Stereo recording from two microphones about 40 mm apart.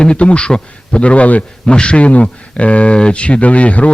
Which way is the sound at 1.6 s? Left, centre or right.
Left.